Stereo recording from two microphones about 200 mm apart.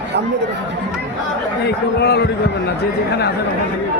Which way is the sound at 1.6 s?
55° left (ahead or behind).